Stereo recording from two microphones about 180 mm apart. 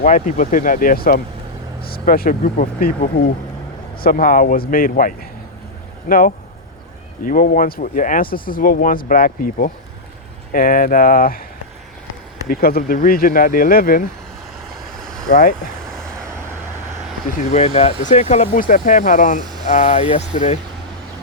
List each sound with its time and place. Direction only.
0.0 s speech: 45° left (ahead or behind)
12.5 s speech: 55° left (ahead or behind)
15.3 s speech: 45° left (ahead or behind)
15.9 s vehicle: 5° left (ahead or behind)
17.2 s speech: 40° left (ahead or behind)